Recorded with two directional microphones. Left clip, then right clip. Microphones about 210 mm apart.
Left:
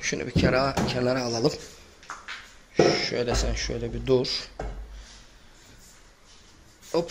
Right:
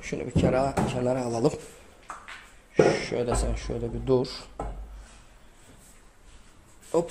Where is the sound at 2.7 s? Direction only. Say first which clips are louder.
Even; 25° right (ahead or behind).